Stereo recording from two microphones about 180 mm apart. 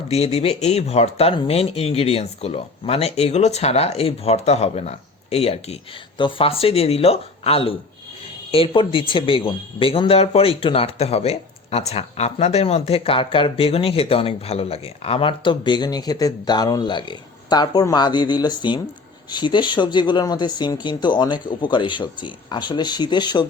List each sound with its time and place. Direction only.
0.1 s speech: 35° left (ahead or behind)